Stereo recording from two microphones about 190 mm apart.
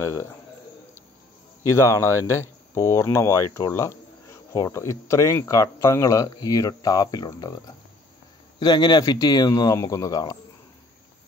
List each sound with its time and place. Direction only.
0.0 s speech: 15° left (ahead or behind)
1.6 s speech: 15° left (ahead or behind)